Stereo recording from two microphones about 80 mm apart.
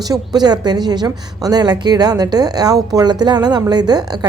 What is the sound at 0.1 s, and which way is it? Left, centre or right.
A woman's voice, right.